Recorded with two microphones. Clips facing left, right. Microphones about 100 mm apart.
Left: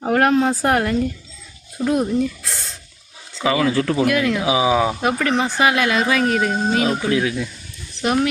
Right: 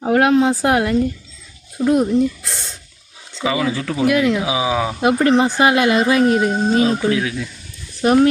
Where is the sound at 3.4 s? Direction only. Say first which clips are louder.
Left 2 dB; 10° right (ahead or behind).